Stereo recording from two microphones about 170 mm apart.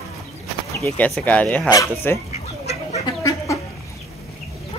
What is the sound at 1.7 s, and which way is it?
Speech, 20° left (ahead or behind).